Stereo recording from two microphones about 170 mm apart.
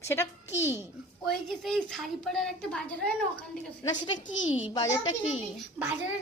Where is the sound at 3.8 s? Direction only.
25° left (ahead or behind).